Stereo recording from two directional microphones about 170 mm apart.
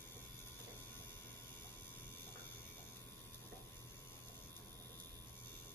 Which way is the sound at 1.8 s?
10° left (ahead or behind).